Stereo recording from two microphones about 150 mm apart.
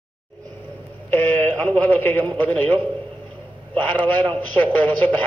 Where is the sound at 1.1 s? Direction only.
10° left (ahead or behind).